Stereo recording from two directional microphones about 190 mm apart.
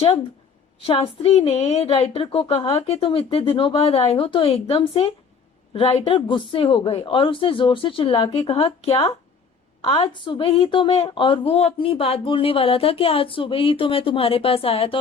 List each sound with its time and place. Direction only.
0.8 s a woman's voice: 30° left (ahead or behind)